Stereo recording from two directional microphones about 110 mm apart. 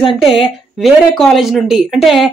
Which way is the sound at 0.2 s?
5° right (ahead or behind).